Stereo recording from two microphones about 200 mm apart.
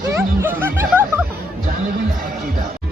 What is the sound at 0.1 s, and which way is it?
Music, 10° right (ahead or behind).